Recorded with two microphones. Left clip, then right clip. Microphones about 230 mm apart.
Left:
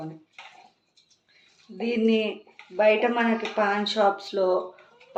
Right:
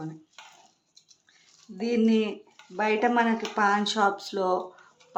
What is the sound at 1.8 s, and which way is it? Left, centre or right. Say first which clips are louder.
Speech: left 1 dB; right.